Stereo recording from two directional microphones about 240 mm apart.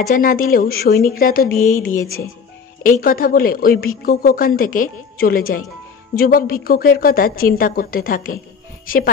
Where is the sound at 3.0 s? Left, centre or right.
Left.